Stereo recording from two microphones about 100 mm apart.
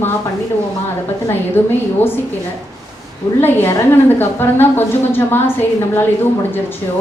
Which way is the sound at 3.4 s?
20° left (ahead or behind).